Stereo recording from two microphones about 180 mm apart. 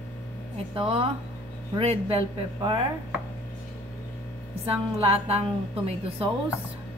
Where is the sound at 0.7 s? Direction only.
30° right (ahead or behind).